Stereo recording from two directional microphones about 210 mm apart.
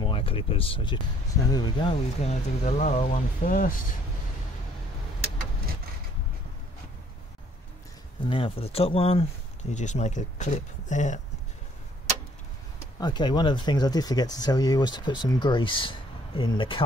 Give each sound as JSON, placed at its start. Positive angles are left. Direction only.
{"t": 0.0, "sound": "speech", "side_deg": 25}
{"t": 8.3, "sound": "speech", "side_deg": 25}
{"t": 12.7, "sound": "speech", "side_deg": 20}